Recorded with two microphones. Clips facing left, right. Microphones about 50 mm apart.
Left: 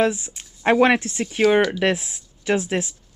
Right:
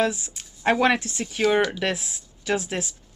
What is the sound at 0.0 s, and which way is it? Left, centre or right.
Speech, left.